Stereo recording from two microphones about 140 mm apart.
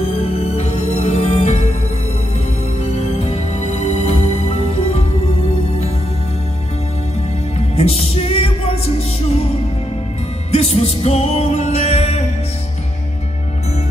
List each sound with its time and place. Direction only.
0.2 s music: 50° left (ahead or behind)
2.8 s music: 50° left (ahead or behind)
7.5 s music: 50° left (ahead or behind)
10.5 s music: 50° left (ahead or behind)